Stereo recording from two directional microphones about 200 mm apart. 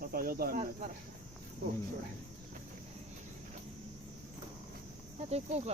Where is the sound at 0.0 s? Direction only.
45° right (ahead or behind).